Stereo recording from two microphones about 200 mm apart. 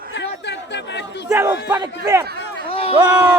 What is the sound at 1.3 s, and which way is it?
Speech, 15° right (ahead or behind).